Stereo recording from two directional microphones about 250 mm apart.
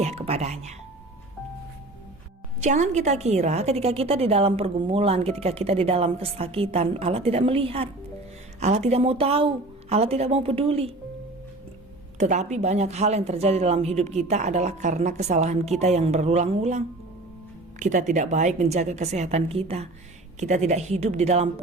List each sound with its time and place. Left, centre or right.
0.0 s a woman's voice: right
2.6 s a woman's voice: right
12.1 s a woman's voice: right